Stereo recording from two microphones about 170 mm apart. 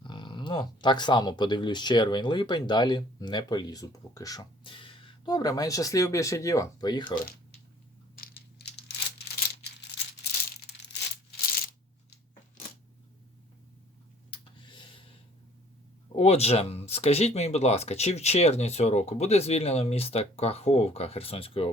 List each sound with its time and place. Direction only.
0.0 s speech: 25° left (ahead or behind)
9.1 s a sound: 70° left (ahead or behind)
16.1 s speech: 40° left (ahead or behind)